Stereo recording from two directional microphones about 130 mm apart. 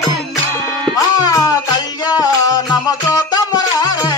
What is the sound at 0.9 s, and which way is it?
Music, 30° left (ahead or behind).